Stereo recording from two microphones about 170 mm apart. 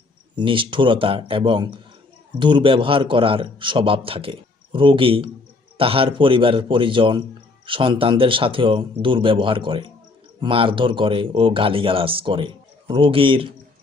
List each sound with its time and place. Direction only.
0.3 s a man's voice: 30° right (ahead or behind)